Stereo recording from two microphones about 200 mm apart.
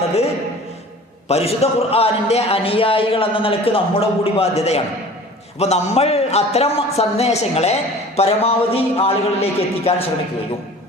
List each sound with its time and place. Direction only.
1.3 s a man's voice: 30° left (ahead or behind)